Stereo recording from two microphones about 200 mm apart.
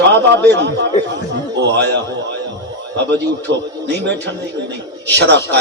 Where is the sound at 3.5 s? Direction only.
60° right (ahead or behind).